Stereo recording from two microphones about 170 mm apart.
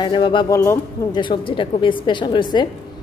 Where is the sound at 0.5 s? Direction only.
20° left (ahead or behind).